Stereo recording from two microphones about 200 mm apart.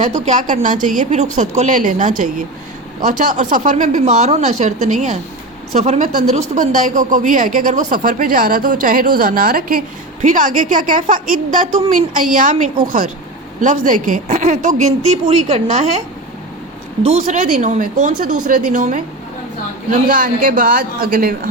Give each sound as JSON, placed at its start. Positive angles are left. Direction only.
{"t": 0.0, "sound": "a woman's voice", "side_deg": -35}
{"t": 17.0, "sound": "a woman's voice", "side_deg": -30}